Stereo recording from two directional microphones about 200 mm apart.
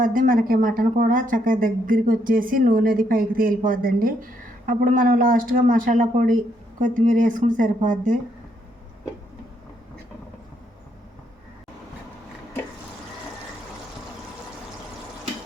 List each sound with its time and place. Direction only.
0.0 s speech: 45° right (ahead or behind)